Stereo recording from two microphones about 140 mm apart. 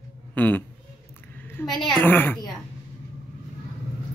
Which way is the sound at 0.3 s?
10° left (ahead or behind).